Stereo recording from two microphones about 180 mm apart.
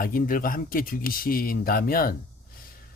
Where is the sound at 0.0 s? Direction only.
50° left (ahead or behind).